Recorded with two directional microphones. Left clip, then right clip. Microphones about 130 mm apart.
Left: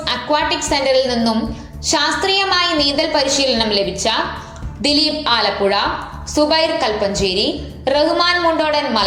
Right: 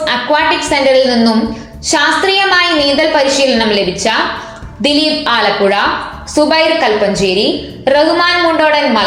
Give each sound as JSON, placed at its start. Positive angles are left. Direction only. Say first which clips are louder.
{"t": 0.0, "sound": "a woman's voice", "louder": "right 6 dB", "side_deg": 35}